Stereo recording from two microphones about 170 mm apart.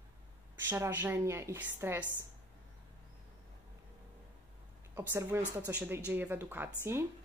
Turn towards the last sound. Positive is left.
turn(degrees=-15)  # may be behind; listen again after turning